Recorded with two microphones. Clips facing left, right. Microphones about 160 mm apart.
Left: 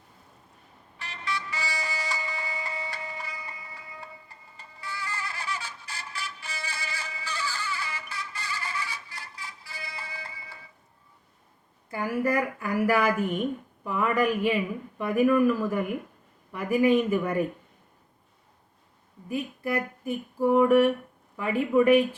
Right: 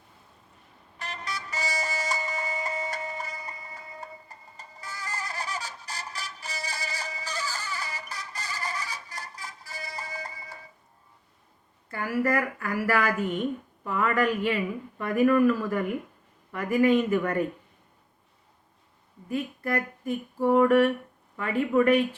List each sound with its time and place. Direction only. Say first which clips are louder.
0.9 s vehicle: left 2 dB; 40° right (ahead or behind)
11.9 s a woman's voice: even; 15° left (ahead or behind)
19.3 s a sound: even; 10° left (ahead or behind)
21.8 s a woman's voice: left 2 dB; 10° left (ahead or behind)